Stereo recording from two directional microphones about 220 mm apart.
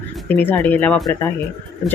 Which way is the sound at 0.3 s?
10° left (ahead or behind).